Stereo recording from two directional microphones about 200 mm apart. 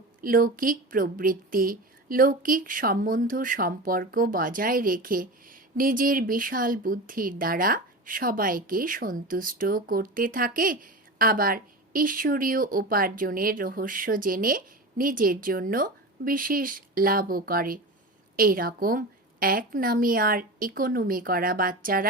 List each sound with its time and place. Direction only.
0.2 s a woman's voice: 45° right (ahead or behind)